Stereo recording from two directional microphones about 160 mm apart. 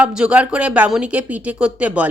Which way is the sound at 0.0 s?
5° right (ahead or behind).